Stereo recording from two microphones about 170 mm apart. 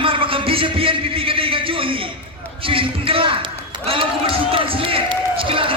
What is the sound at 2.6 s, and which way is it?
A man's voice, 30° right (ahead or behind).